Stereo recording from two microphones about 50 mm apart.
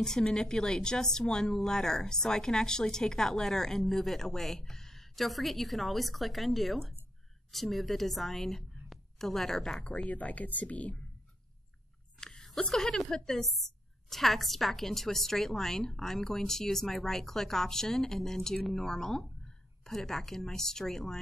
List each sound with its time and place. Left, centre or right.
0.0 s a woman's voice: centre
9.8 s speech: left
12.2 s a sound: centre
12.5 s a woman's voice: centre